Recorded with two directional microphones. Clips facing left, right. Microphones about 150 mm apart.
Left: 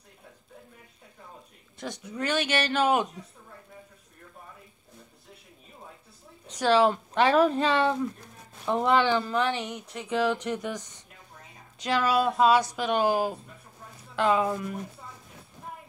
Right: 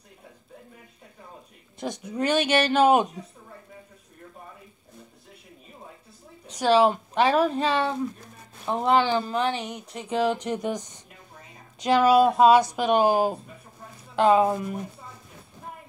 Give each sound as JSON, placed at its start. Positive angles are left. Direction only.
{"t": 1.8, "sound": "speech", "side_deg": -20}
{"t": 6.6, "sound": "speech", "side_deg": -15}